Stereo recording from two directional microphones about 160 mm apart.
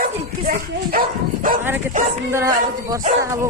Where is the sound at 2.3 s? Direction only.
20° right (ahead or behind).